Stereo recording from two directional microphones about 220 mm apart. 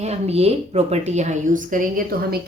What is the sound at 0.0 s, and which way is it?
A woman's voice, 30° right (ahead or behind).